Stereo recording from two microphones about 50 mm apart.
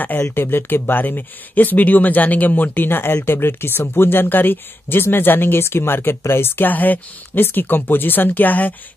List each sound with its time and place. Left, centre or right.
0.3 s speech: left
6.7 s speech: left